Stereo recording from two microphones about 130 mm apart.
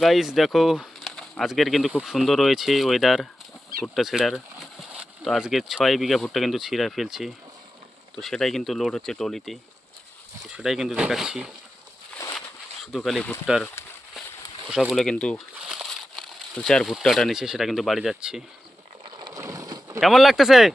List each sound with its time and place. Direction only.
0.0 s speech: centre (ahead or behind)
13.0 s speech: 5° left (ahead or behind)
13.8 s a sound: 20° left (ahead or behind)
14.7 s speech: centre (ahead or behind)
19.0 s boat: 35° right (ahead or behind)
19.4 s boat: 25° right (ahead or behind)
20.0 s speech: centre (ahead or behind)